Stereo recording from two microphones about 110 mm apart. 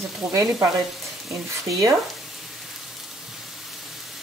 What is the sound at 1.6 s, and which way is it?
Frying, 30° right (ahead or behind).